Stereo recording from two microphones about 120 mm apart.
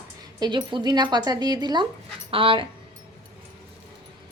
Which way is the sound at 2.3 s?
50° right (ahead or behind).